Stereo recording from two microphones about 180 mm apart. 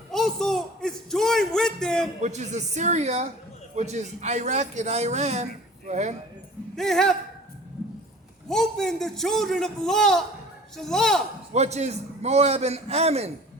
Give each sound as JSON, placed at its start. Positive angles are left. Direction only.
{"t": 0.1, "sound": "a sound", "side_deg": 0}
{"t": 2.2, "sound": "a man's voice", "side_deg": -40}
{"t": 6.7, "sound": "a man's voice", "side_deg": 0}
{"t": 8.4, "sound": "a man's voice", "side_deg": 5}
{"t": 11.5, "sound": "a man's voice", "side_deg": -40}